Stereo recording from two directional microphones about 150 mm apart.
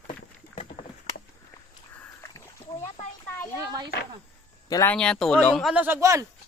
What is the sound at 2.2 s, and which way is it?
Splash, 25° left (ahead or behind).